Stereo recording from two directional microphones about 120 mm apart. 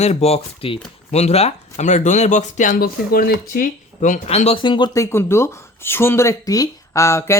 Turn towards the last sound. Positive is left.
turn(degrees=25)  # may be behind; listen again after turning